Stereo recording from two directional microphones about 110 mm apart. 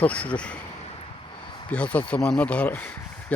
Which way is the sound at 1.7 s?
10° left (ahead or behind).